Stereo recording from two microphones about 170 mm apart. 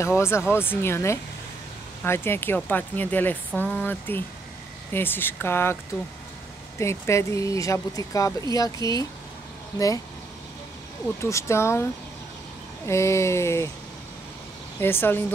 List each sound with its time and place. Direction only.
0.0 s speech: 15° left (ahead or behind)
6.8 s speech: 15° left (ahead or behind)
11.2 s speech: 15° left (ahead or behind)
14.8 s speech: 15° left (ahead or behind)